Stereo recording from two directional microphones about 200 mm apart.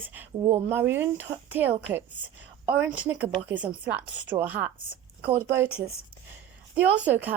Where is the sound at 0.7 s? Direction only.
10° right (ahead or behind).